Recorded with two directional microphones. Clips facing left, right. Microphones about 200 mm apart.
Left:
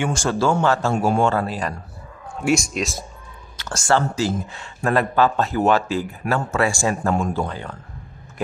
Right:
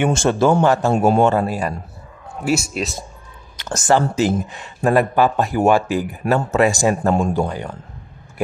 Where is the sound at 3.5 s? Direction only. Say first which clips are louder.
Right 3 dB; 20° right (ahead or behind).